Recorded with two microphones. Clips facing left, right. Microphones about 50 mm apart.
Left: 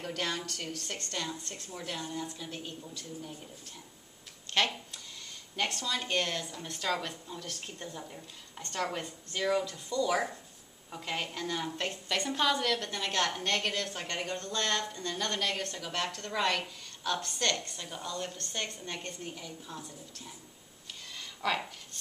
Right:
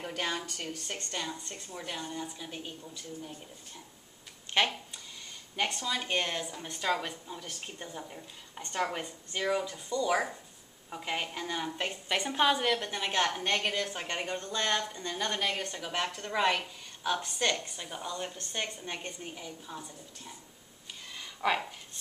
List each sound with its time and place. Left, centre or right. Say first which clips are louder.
0.0 s speech: right 1 dB; centre
4.5 s a woman's voice: right 1 dB; centre
21.2 s a sound: right 2 dB; centre